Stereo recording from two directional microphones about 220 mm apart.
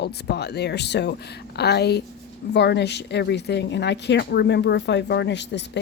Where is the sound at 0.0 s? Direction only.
50° left (ahead or behind).